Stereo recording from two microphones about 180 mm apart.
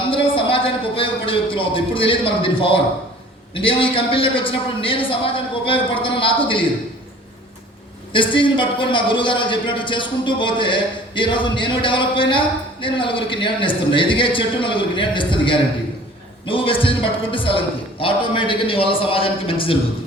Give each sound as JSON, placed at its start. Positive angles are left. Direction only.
{"t": 0.1, "sound": "a sound", "side_deg": 30}
{"t": 3.5, "sound": "a man's voice", "side_deg": 30}
{"t": 8.1, "sound": "a man's voice", "side_deg": 30}